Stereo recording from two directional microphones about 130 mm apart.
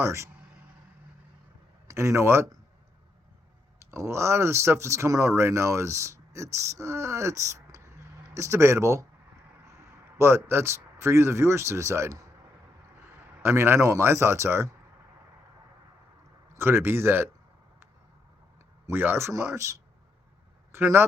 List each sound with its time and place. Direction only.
0.0 s speech: 20° right (ahead or behind)
1.9 s speech: 20° right (ahead or behind)
3.8 s speech: 20° right (ahead or behind)
10.2 s speech: 20° right (ahead or behind)
13.4 s speech: 20° right (ahead or behind)
16.6 s speech: 15° right (ahead or behind)
18.9 s speech: 15° right (ahead or behind)